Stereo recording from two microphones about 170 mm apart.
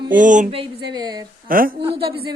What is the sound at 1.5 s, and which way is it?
Speech, 55° right (ahead or behind).